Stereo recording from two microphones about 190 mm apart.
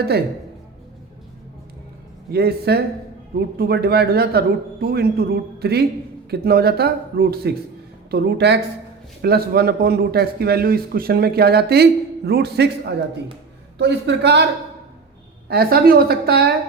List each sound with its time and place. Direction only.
2.3 s a man's voice: 55° right (ahead or behind)
13.7 s a man's voice: 65° right (ahead or behind)
15.4 s a man's voice: 55° right (ahead or behind)